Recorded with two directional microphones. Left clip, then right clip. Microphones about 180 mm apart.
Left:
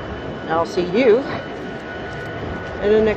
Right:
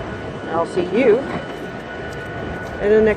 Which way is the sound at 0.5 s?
20° left (ahead or behind).